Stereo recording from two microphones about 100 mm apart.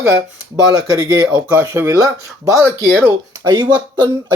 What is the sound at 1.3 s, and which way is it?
Speech, 15° right (ahead or behind).